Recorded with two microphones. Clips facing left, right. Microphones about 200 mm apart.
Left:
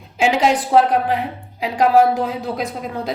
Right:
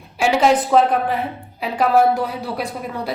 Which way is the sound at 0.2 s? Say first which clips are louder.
Right 1 dB; 15° left (ahead or behind).